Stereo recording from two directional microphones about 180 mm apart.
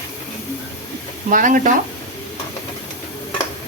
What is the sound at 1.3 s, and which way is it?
Speech, 45° right (ahead or behind).